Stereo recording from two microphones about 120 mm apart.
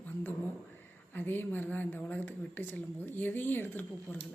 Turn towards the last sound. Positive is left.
turn(degrees=15)  # may be behind; listen again after turning